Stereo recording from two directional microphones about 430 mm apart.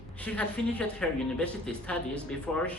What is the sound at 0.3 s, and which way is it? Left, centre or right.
A woman's voice, centre.